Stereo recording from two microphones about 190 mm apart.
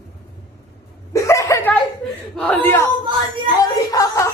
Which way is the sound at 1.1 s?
15° left (ahead or behind).